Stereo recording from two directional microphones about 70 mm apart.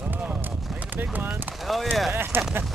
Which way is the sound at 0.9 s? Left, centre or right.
Right.